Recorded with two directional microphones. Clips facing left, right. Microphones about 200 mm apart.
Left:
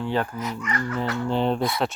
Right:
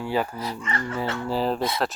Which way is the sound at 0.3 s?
30° right (ahead or behind).